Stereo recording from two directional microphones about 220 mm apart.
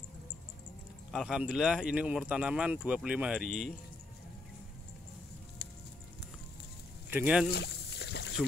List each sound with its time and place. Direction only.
1.1 s speech: centre (ahead or behind)
7.1 s speech: 5° right (ahead or behind)
7.4 s rowboat: 50° left (ahead or behind)